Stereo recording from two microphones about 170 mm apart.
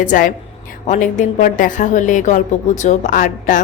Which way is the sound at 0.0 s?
50° left (ahead or behind).